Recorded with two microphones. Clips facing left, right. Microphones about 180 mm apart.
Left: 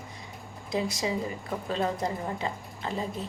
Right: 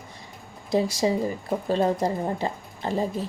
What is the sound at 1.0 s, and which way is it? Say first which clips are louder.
A woman's voice: right 7 dB; 40° right (ahead or behind).